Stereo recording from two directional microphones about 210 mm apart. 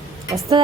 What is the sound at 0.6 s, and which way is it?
Speech, 20° right (ahead or behind).